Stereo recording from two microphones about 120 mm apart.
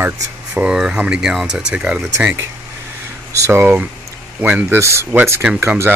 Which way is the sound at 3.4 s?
20° right (ahead or behind).